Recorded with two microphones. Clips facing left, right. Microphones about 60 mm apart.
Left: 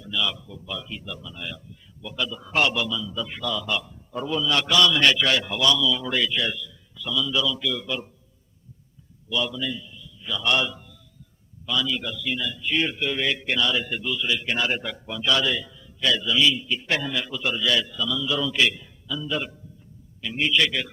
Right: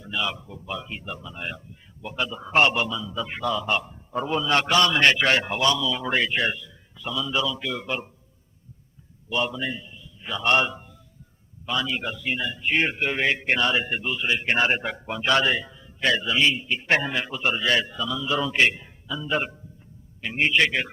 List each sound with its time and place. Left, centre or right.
0.0 s speech: right
9.3 s a man's voice: right